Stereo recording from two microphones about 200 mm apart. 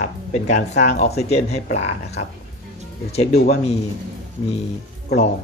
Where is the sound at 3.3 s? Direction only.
35° left (ahead or behind).